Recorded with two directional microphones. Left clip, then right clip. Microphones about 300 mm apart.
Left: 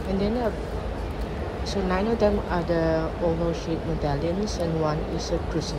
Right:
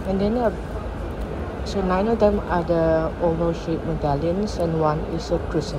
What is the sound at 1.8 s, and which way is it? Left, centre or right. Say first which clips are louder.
Speech: right 4 dB; centre.